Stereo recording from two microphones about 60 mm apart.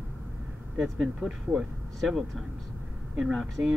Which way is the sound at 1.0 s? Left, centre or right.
Centre.